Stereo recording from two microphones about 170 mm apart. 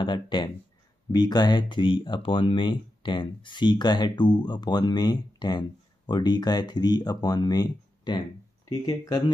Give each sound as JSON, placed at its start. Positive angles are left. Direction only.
{"t": 0.0, "sound": "speech", "side_deg": 30}